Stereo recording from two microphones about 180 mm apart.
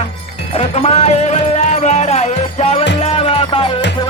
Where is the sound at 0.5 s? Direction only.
35° left (ahead or behind).